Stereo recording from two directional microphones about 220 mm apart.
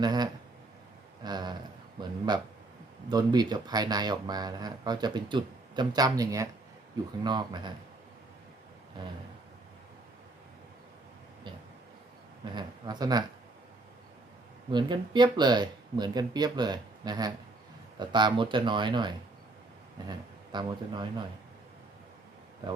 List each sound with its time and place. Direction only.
0.0 s speech: 20° right (ahead or behind)
12.5 s speech: 20° right (ahead or behind)
14.7 s a man's voice: 20° right (ahead or behind)